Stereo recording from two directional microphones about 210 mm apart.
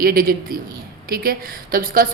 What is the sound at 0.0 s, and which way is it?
A woman's voice, 45° right (ahead or behind).